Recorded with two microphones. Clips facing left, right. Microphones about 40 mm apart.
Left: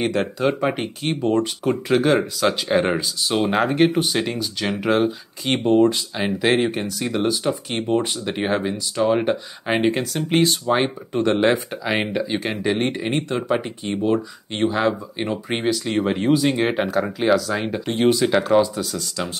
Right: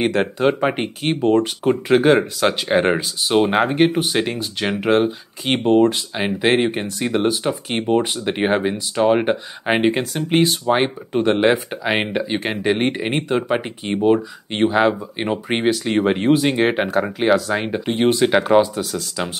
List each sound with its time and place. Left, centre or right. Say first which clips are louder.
0.0 s speech: right 3 dB; centre
10.1 s speech: right 1 dB; centre; by 16.8 s right
16.8 s speech: right 2 dB; centre
17.4 s speech: right 2 dB; right